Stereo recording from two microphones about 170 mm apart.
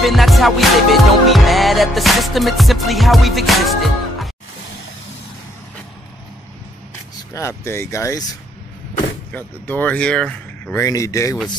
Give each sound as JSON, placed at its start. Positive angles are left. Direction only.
{"t": 0.0, "sound": "music", "side_deg": 0}
{"t": 7.3, "sound": "speech", "side_deg": 15}
{"t": 9.3, "sound": "speech", "side_deg": 10}